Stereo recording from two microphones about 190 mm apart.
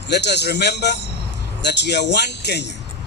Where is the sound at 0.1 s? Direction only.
65° left (ahead or behind).